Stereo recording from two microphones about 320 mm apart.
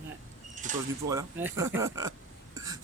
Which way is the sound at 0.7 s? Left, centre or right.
Right.